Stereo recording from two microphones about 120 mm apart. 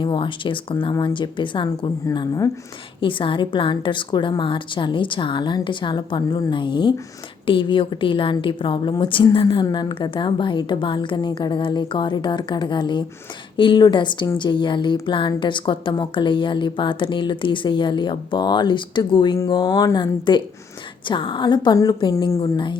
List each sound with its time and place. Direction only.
0.0 s a woman's voice: 45° left (ahead or behind)
2.1 s a woman's voice: 30° left (ahead or behind)
3.0 s a woman's voice: 45° left (ahead or behind)
21.8 s a woman's voice: 30° left (ahead or behind)
22.5 s a woman's voice: 40° left (ahead or behind)